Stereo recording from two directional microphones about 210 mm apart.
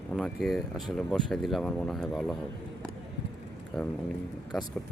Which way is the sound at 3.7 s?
Centre (ahead or behind).